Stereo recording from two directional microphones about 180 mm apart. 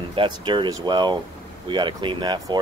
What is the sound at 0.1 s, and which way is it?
Speech, 25° right (ahead or behind).